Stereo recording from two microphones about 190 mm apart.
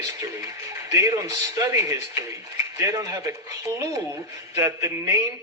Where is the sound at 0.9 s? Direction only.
15° right (ahead or behind).